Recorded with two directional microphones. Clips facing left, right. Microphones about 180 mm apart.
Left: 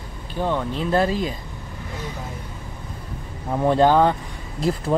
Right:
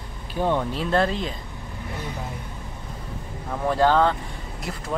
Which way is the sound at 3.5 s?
20° left (ahead or behind).